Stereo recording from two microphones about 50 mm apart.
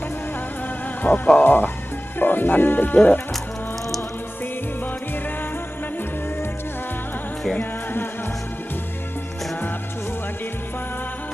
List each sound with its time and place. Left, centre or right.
1.0 s speech: left
7.5 s music: left